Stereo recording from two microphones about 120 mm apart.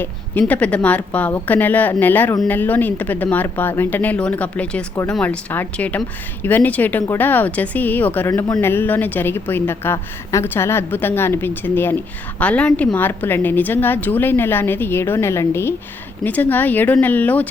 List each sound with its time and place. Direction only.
0.0 s a woman's voice: 15° left (ahead or behind)